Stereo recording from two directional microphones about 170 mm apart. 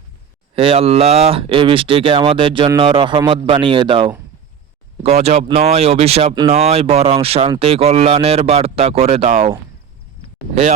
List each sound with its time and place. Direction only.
0.5 s speech: 35° right (ahead or behind)